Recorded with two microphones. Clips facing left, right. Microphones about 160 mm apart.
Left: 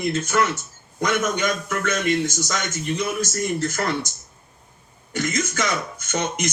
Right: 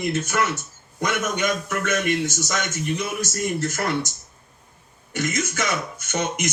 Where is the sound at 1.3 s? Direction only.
15° right (ahead or behind).